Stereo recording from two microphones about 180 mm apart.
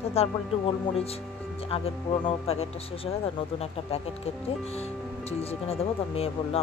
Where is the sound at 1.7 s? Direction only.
35° left (ahead or behind).